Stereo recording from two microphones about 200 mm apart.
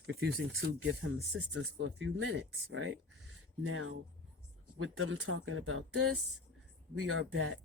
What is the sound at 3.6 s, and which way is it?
Speech, 90° right.